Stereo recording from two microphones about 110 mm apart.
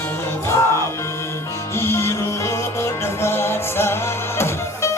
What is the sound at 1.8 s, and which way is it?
Music, 25° left (ahead or behind).